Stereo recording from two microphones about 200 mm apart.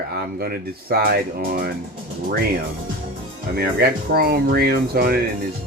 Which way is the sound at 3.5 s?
50° right (ahead or behind).